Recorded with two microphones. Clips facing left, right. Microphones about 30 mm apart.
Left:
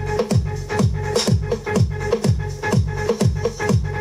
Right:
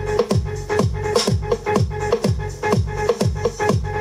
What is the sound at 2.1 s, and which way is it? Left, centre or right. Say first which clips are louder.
Music: right 1 dB; centre.